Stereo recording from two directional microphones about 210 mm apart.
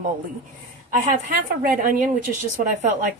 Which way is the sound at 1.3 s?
40° right (ahead or behind).